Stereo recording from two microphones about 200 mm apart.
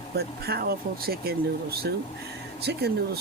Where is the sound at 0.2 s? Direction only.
50° right (ahead or behind).